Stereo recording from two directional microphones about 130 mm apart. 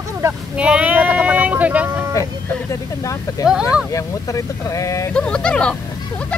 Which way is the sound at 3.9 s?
25° left (ahead or behind).